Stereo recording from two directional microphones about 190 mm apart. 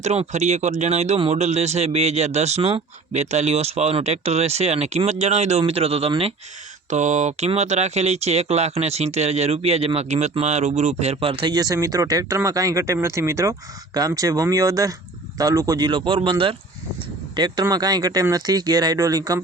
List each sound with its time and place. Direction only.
0.0 s speech: 35° right (ahead or behind); by 19.4 s 20° right (ahead or behind)